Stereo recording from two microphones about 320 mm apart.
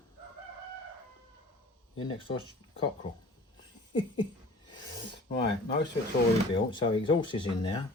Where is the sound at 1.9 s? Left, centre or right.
Centre.